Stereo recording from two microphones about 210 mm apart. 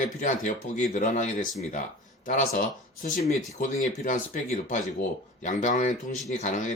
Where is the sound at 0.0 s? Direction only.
35° left (ahead or behind).